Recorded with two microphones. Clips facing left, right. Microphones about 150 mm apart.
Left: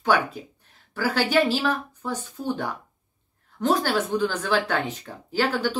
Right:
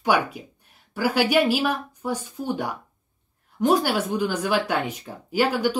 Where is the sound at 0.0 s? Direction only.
15° right (ahead or behind).